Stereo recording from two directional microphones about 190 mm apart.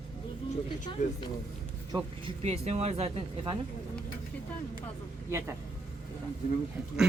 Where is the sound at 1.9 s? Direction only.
30° right (ahead or behind).